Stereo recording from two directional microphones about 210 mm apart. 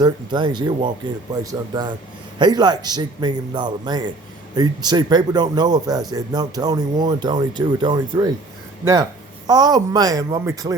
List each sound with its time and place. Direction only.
0.0 s speech: 20° right (ahead or behind)